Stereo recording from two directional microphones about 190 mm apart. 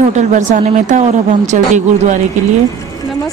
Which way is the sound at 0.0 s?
40° right (ahead or behind).